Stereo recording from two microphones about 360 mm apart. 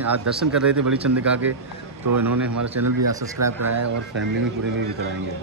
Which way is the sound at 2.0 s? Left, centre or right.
Right.